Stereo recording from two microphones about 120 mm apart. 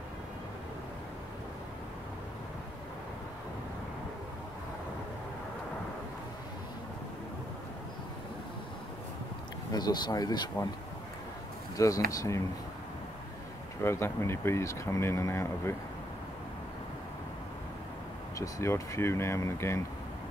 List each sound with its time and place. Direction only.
9.7 s speech: 35° left (ahead or behind)
11.7 s speech: 30° left (ahead or behind)
13.8 s speech: 20° left (ahead or behind)
18.4 s speech: 25° left (ahead or behind)